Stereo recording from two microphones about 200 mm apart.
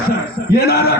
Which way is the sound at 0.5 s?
50° left (ahead or behind).